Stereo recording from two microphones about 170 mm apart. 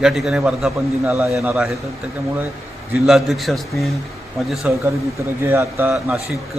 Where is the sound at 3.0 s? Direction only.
Centre (ahead or behind).